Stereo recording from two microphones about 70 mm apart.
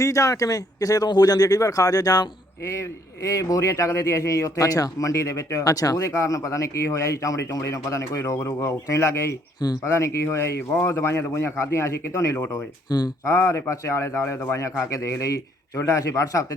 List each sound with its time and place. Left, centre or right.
0.0 s speech: left
3.2 s a man's voice: left
12.9 s speech: left
13.2 s a man's voice: left